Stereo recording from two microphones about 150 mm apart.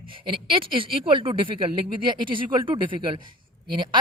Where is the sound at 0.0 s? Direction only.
35° right (ahead or behind).